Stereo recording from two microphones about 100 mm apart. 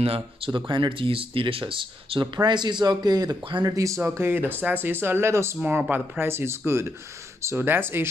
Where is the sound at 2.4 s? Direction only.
45° right (ahead or behind); by 5.5 s 25° right (ahead or behind).